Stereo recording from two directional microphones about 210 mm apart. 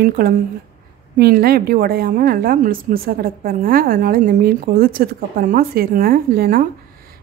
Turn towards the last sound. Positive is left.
turn(degrees=-45)  # may be behind; listen again after turning